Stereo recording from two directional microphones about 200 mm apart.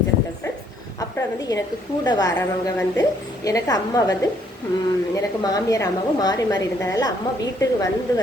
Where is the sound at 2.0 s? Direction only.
20° left (ahead or behind).